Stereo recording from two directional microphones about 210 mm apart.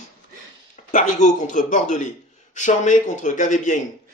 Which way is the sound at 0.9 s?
35° left (ahead or behind).